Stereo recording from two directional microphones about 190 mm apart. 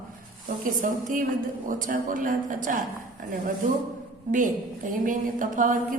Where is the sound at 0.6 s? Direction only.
45° right (ahead or behind).